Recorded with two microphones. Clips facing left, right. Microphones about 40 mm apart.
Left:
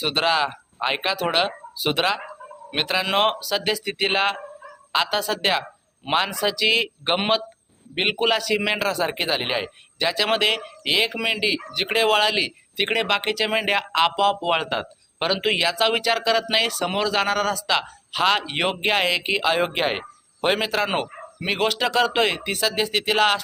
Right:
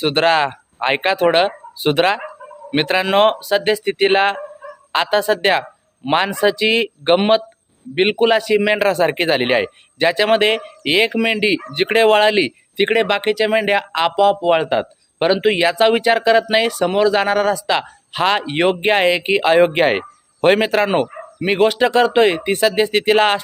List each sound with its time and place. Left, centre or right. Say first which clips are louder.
0.0 s speech: right 6 dB; right
3.0 s speech: right 7 dB; centre
8.5 s speech: right 8 dB; centre
8.8 s speech: right 8 dB; right
11.1 s a man's voice: right 7 dB; centre
15.5 s speech: right 7 dB; right
18.9 s speech: right 4 dB; right
21.1 s speech: right 7 dB; centre